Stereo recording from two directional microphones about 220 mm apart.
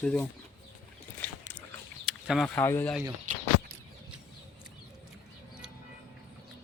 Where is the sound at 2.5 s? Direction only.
10° left (ahead or behind).